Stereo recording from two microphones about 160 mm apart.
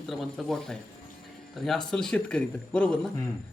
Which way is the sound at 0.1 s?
Centre (ahead or behind).